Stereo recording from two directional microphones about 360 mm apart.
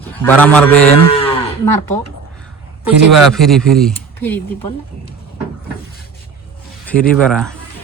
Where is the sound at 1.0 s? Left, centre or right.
Centre.